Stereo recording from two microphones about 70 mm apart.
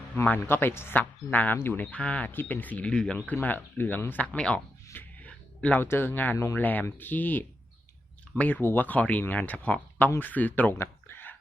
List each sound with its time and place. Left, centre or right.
0.3 s speech: left; by 3.2 s centre
3.4 s speech: left
4.4 s speech: centre
4.9 s music: left
5.6 s speech: left
6.3 s speech: left
6.6 s speech: left